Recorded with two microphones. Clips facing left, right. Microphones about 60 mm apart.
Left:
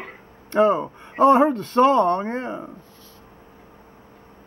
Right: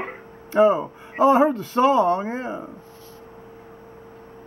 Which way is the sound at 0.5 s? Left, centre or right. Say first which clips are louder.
Right 1 dB; centre.